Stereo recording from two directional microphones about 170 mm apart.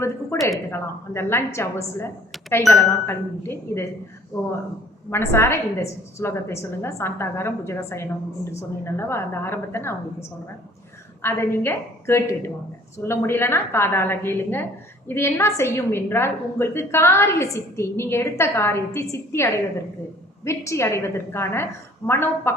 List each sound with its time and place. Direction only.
0.3 s a woman's voice: 15° left (ahead or behind)
11.2 s a woman's voice: 15° left (ahead or behind)